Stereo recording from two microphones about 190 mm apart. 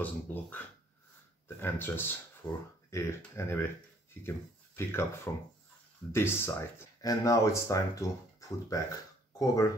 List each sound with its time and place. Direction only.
0.0 s speech: 10° left (ahead or behind)
1.6 s speech: 10° left (ahead or behind)